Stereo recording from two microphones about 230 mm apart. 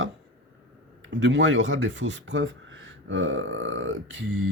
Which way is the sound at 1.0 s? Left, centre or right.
Right.